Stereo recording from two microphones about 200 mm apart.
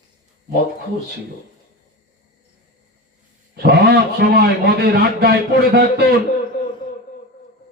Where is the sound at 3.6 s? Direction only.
55° right (ahead or behind).